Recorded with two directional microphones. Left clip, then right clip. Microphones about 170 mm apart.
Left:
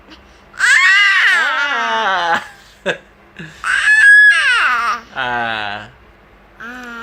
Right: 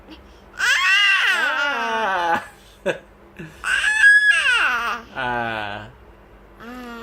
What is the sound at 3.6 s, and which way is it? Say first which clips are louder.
Crying: left 6 dB; 25° right (ahead or behind).